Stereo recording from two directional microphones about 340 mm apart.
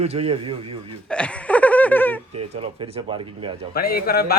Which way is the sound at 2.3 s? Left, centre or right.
Centre.